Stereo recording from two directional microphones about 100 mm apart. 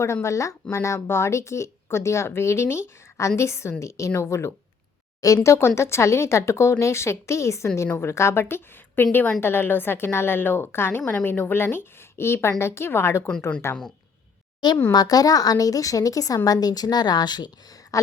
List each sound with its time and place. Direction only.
0.0 s a woman's voice: 30° left (ahead or behind)
14.6 s a woman's voice: 45° left (ahead or behind)